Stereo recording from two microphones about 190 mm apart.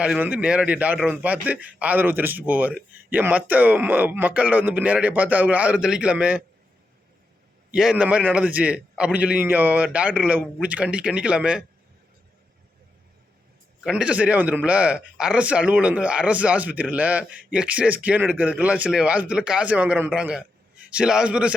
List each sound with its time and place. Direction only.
0.0 s a man's voice: 5° right (ahead or behind)
7.7 s a man's voice: 5° right (ahead or behind)
13.8 s a man's voice: 5° right (ahead or behind)